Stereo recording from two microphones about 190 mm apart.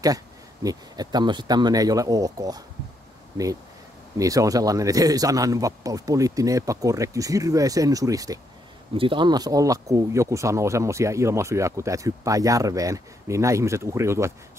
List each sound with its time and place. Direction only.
0.7 s speech: 20° right (ahead or behind)
4.2 s speech: 15° right (ahead or behind)